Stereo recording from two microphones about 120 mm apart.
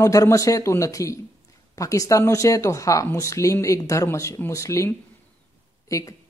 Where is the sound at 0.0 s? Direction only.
25° left (ahead or behind).